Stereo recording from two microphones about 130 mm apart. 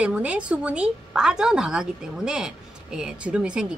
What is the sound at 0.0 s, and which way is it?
A woman's voice, 10° right (ahead or behind).